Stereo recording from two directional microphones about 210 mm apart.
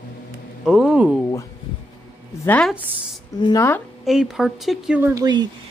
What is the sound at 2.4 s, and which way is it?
Speech, 10° left (ahead or behind).